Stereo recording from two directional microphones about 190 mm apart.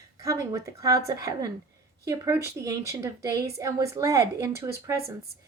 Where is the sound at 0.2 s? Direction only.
15° right (ahead or behind).